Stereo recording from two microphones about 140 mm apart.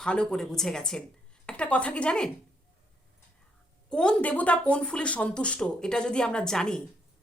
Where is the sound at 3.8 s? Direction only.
5° left (ahead or behind).